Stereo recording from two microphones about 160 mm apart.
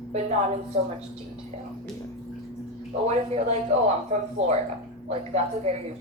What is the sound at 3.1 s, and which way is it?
Speech, 45° right (ahead or behind).